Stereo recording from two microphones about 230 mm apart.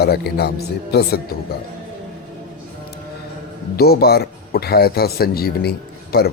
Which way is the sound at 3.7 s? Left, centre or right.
Left.